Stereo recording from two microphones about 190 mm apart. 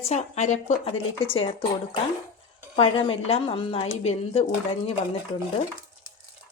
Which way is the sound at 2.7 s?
30° left (ahead or behind).